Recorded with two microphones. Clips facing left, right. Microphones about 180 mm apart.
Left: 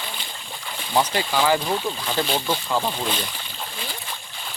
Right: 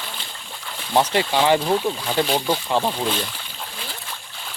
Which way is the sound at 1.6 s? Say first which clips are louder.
Right 4 dB; 5° right (ahead or behind).